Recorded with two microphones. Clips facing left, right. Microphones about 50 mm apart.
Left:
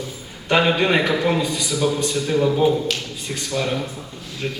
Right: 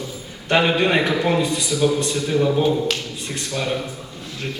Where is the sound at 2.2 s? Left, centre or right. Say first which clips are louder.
Left 1 dB; centre.